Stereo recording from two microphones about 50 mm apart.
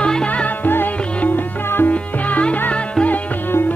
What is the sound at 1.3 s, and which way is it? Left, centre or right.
Music, left.